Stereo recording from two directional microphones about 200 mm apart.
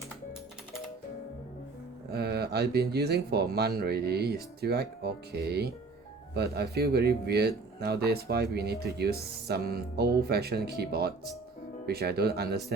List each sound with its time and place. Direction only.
2.0 s speech: 50° right (ahead or behind)